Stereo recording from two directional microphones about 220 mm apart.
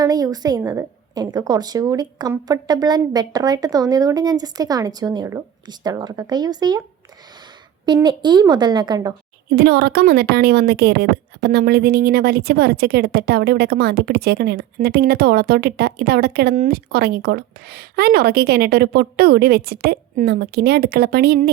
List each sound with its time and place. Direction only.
0.0 s a woman's voice: 15° right (ahead or behind)
7.9 s a woman's voice: 20° right (ahead or behind)
9.5 s a woman's voice: 45° right (ahead or behind)